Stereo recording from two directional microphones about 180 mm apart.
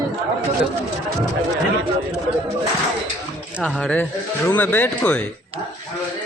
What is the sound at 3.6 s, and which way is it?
Speech, 5° left (ahead or behind).